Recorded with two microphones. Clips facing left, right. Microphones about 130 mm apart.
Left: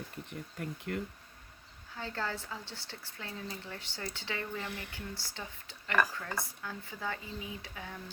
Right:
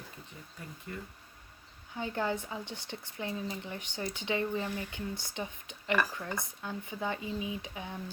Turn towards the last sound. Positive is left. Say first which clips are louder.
# right 4 dB
turn(degrees=-20)  # may be behind; listen again after turning